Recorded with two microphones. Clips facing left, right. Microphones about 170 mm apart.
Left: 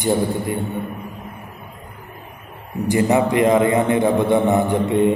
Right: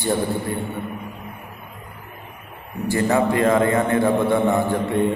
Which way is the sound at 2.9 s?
20° left (ahead or behind).